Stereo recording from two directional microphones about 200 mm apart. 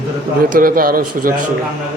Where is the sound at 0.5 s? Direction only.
45° right (ahead or behind).